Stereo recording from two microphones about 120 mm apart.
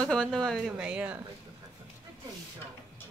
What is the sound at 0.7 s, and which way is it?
Speech, 10° right (ahead or behind).